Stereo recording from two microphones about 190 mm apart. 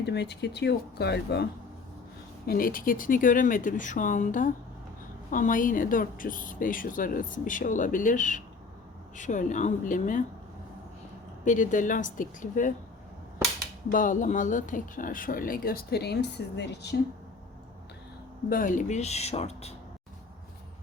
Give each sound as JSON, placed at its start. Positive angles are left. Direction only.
{"t": 0.0, "sound": "speech", "side_deg": 60}
{"t": 2.5, "sound": "a woman's voice", "side_deg": 50}
{"t": 11.4, "sound": "a woman's voice", "side_deg": 45}
{"t": 13.9, "sound": "a woman's voice", "side_deg": 45}
{"t": 18.4, "sound": "speech", "side_deg": 45}